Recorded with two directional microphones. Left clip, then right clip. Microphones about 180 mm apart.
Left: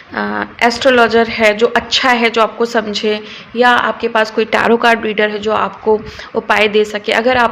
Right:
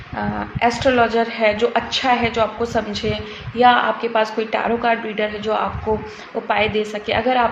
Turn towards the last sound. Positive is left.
turn(degrees=40)  # may be behind; listen again after turning